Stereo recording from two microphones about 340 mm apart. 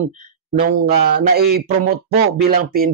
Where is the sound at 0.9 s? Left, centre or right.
Right.